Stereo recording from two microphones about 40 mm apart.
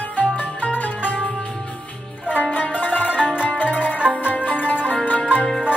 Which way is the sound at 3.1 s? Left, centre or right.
Right.